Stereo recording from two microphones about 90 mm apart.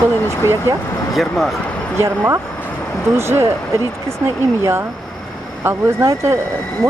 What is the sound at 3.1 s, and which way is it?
Speech, 30° right (ahead or behind).